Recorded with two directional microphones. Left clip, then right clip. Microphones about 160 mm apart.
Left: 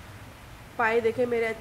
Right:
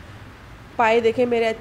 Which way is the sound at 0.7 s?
25° right (ahead or behind).